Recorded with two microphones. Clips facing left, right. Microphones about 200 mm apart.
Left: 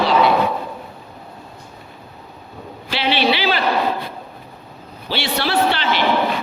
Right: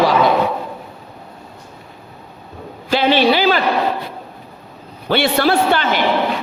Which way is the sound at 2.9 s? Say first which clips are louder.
Right 5 dB; 45° right (ahead or behind).